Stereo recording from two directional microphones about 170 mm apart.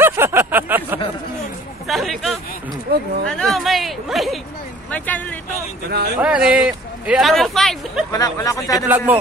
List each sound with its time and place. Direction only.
0.0 s a sound: 15° right (ahead or behind)
1.9 s hubbub: centre (ahead or behind)
2.9 s speech: 65° right (ahead or behind)
3.3 s a sound: centre (ahead or behind)
4.9 s speech: 10° left (ahead or behind)
6.1 s speech: 5° right (ahead or behind)
8.1 s speech: 20° left (ahead or behind)
8.8 s speech: 10° right (ahead or behind)